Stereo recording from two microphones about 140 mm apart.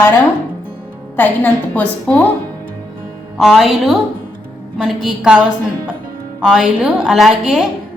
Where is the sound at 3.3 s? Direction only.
Centre (ahead or behind).